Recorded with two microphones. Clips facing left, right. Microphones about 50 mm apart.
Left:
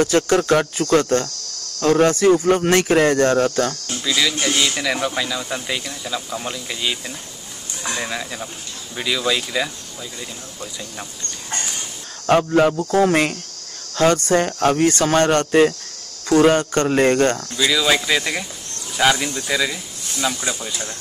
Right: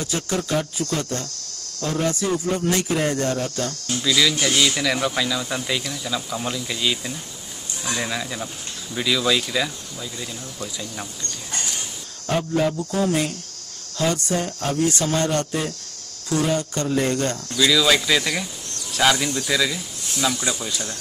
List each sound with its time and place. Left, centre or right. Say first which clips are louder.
0.0 s speech: left 9 dB; left
4.0 s speech: even; centre
12.3 s speech: left 7 dB; left
17.6 s speech: right 2 dB; centre